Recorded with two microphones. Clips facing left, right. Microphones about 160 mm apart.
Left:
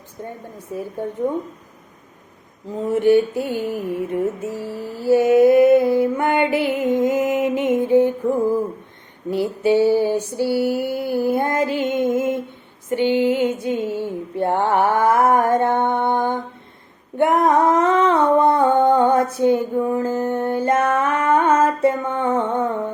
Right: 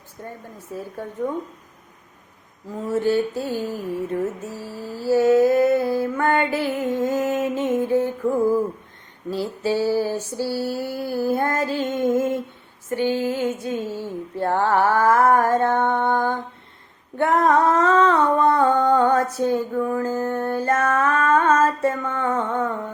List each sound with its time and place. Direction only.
0.2 s a woman's voice: 20° left (ahead or behind)
0.7 s mantra: 15° left (ahead or behind)
2.8 s mantra: 15° left (ahead or behind)
9.3 s mantra: 15° left (ahead or behind)
12.9 s a sound: 20° left (ahead or behind)